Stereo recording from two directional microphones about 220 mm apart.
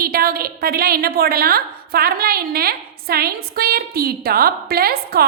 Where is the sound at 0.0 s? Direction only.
40° right (ahead or behind).